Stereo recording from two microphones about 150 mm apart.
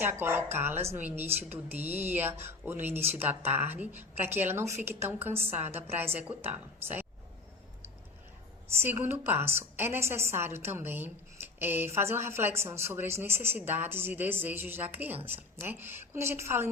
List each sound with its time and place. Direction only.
0.0 s a woman's voice: 15° right (ahead or behind)
8.8 s a woman's voice: 15° right (ahead or behind)